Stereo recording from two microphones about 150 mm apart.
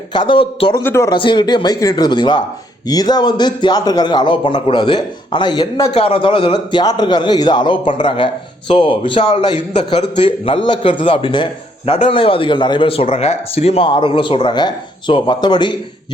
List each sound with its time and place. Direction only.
0.1 s a man's voice: 30° left (ahead or behind)
0.8 s speech: 15° left (ahead or behind)
1.1 s a man's voice: 30° left (ahead or behind)
5.8 s a man's voice: 40° left (ahead or behind)